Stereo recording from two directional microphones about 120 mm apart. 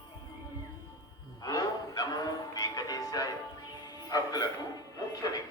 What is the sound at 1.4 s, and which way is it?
Music, 35° left (ahead or behind).